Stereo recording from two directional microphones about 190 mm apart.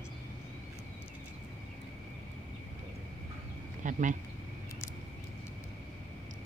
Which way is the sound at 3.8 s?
40° right (ahead or behind).